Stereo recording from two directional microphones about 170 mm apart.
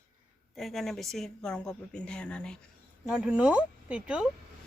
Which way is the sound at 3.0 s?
5° right (ahead or behind).